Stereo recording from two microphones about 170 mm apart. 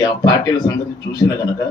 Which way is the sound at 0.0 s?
25° left (ahead or behind).